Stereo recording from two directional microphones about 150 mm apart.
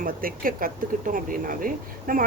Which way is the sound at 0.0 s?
70° right (ahead or behind).